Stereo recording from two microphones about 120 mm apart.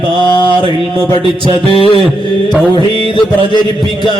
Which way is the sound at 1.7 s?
50° left (ahead or behind).